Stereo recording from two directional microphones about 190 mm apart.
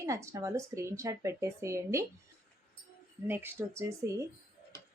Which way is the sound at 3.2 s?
10° right (ahead or behind).